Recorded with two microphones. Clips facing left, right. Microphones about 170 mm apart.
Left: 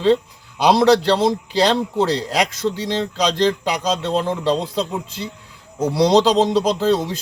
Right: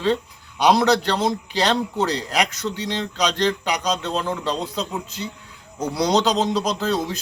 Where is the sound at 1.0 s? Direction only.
30° left (ahead or behind).